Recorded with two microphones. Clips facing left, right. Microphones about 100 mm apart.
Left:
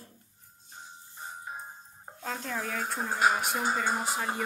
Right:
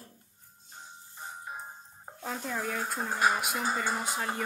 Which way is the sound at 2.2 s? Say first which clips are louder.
Even; 5° right (ahead or behind).